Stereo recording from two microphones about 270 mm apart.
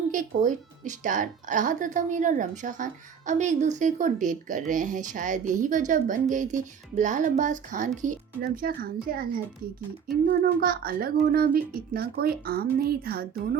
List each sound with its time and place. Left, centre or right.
0.1 s a woman's voice: right